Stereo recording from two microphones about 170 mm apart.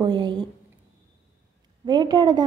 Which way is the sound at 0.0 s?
25° right (ahead or behind).